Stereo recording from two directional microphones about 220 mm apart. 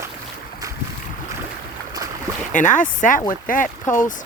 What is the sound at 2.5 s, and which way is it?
Speech, 35° left (ahead or behind).